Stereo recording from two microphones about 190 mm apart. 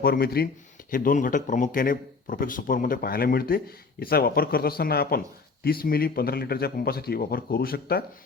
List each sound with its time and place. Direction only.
0.0 s a man's voice: 55° left (ahead or behind)